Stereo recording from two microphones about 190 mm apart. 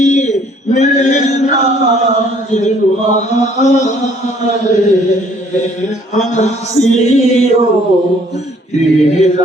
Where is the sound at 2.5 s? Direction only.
40° left (ahead or behind).